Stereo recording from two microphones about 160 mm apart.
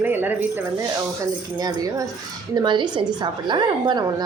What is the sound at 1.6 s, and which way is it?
A woman's voice, 25° right (ahead or behind).